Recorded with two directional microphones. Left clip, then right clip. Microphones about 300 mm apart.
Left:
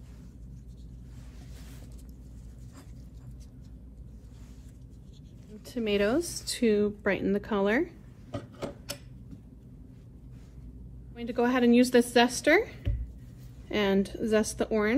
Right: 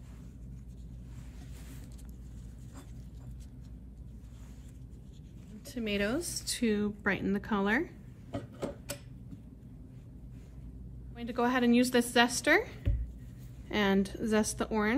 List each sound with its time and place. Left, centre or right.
5.7 s speech: centre
8.3 s a sound: centre
11.1 s a woman's voice: centre